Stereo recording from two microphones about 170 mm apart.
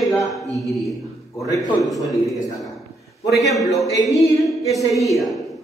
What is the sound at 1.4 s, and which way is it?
Speech, 20° left (ahead or behind).